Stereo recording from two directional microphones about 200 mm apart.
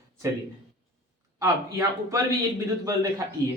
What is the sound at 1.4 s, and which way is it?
Speech, 15° right (ahead or behind).